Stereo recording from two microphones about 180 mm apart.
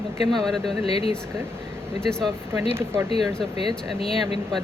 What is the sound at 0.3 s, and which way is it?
Speech, centre (ahead or behind).